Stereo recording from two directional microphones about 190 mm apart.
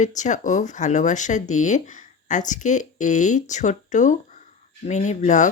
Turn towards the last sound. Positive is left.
turn(degrees=40)  # may be behind; listen again after turning